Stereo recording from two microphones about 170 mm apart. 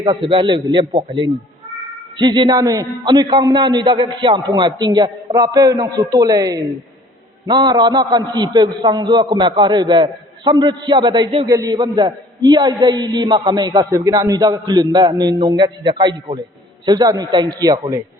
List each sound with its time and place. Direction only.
0.0 s a man's voice: 30° right (ahead or behind)